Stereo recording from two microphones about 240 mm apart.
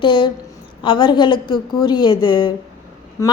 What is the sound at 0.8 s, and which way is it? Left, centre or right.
A woman's voice, centre.